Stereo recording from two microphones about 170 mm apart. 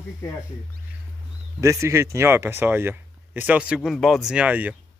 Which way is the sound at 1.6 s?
15° right (ahead or behind).